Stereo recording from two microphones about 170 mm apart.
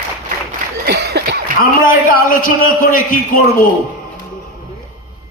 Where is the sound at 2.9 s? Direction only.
55° left (ahead or behind).